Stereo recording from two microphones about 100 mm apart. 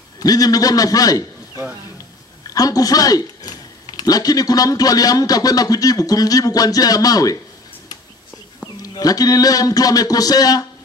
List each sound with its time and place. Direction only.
0.2 s speech: 40° left (ahead or behind)
2.4 s speech: 40° left (ahead or behind)
8.8 s speech: 40° left (ahead or behind)